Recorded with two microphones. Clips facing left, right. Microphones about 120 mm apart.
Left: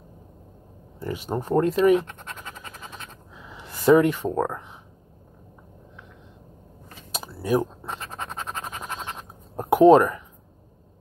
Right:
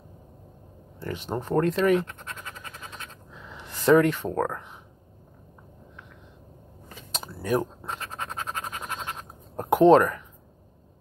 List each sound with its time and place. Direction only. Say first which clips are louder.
1.1 s speech: left 2 dB; 10° left (ahead or behind)
2.3 s a sound: left 1 dB; 15° left (ahead or behind)
2.9 s writing: left 1 dB; 10° left (ahead or behind)
7.1 s scratch: left 3 dB; 10° left (ahead or behind)
9.6 s speech: left 2 dB; 5° left (ahead or behind)